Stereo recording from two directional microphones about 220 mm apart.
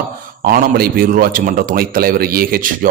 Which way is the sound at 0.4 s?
40° right (ahead or behind).